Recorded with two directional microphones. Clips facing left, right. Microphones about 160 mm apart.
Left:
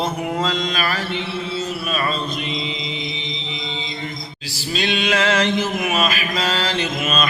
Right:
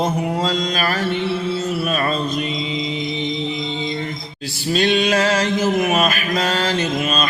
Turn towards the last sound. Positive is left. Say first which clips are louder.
# right 2 dB
turn(degrees=-35)  # may be behind; listen again after turning